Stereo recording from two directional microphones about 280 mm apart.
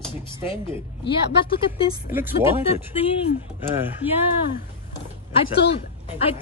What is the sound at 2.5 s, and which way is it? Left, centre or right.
Speech, centre.